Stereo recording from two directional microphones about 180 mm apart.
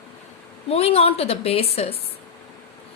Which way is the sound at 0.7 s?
35° left (ahead or behind).